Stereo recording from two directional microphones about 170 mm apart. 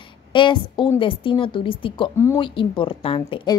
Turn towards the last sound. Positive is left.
turn(degrees=30)  # may be behind; listen again after turning